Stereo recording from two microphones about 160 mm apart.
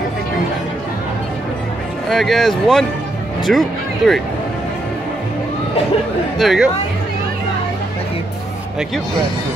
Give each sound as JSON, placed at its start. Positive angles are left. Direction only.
{"t": 2.0, "sound": "speech", "side_deg": 0}
{"t": 6.3, "sound": "speech", "side_deg": 0}